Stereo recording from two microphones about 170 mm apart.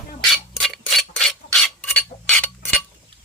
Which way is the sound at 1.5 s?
5° left (ahead or behind).